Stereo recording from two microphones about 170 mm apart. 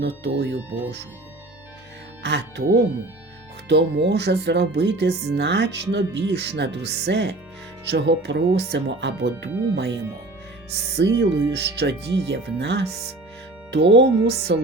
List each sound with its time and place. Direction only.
0.0 s speech: 85° right
2.2 s speech: 80° right
3.7 s speech: 85° right
11.5 s speech: 80° right
13.9 s speech: 80° right